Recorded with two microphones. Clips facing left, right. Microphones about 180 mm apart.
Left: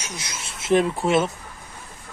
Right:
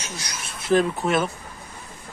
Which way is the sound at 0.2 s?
25° left (ahead or behind).